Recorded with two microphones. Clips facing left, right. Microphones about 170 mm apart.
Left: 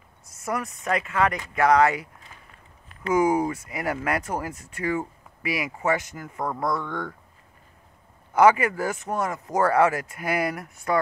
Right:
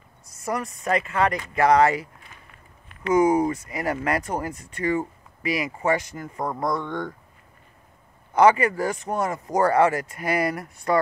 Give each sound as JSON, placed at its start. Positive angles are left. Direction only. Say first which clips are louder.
{"t": 0.4, "sound": "speech", "louder": "right 1 dB", "side_deg": 0}
{"t": 3.1, "sound": "speech", "louder": "right 2 dB", "side_deg": 5}
{"t": 6.4, "sound": "speech", "louder": "right 1 dB", "side_deg": -15}
{"t": 8.4, "sound": "speech", "louder": "right 1 dB", "side_deg": 5}